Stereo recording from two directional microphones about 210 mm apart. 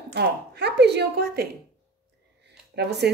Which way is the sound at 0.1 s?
50° right (ahead or behind).